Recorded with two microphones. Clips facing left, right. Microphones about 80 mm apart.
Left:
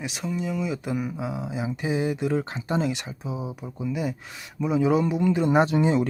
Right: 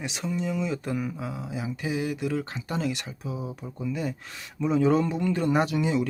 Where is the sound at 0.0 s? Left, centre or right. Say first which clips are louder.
Left 1 dB; centre.